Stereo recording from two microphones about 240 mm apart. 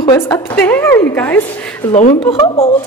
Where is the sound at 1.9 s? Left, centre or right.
Left.